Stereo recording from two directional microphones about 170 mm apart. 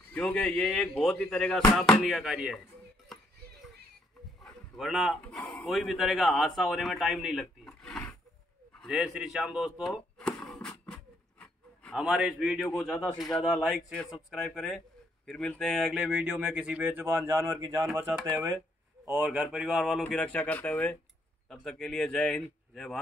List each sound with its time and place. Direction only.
0.1 s speech: 5° left (ahead or behind)
4.4 s speech: centre (ahead or behind)
10.1 s a sound: 5° left (ahead or behind)
11.9 s speech: 5° right (ahead or behind); by 18.6 s 20° right (ahead or behind)
19.0 s speech: 5° right (ahead or behind)